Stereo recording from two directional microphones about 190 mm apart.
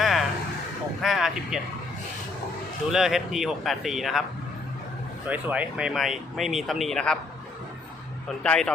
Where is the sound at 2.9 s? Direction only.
Centre (ahead or behind).